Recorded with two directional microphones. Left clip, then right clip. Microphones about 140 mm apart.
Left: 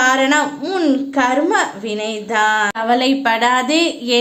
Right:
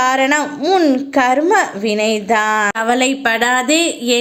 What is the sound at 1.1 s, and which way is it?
A woman's voice, 35° right (ahead or behind).